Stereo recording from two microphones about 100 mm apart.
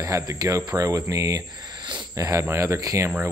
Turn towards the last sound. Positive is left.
turn(degrees=-30)  # may be behind; listen again after turning